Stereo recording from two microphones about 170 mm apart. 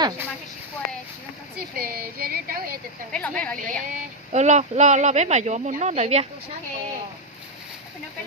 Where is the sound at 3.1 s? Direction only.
5° left (ahead or behind).